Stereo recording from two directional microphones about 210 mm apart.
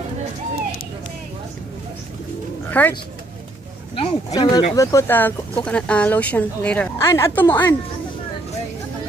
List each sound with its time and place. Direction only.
2.8 s speech: 5° left (ahead or behind)
4.0 s speech: 25° left (ahead or behind)